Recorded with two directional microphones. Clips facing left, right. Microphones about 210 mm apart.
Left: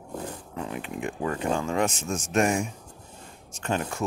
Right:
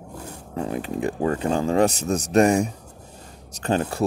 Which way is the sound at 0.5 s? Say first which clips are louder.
Right 9 dB; 40° right (ahead or behind).